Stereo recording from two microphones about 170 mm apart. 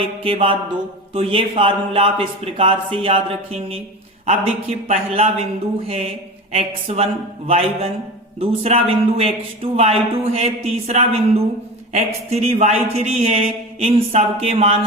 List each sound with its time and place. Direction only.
0.2 s speech: 30° right (ahead or behind)
6.5 s speech: 35° right (ahead or behind)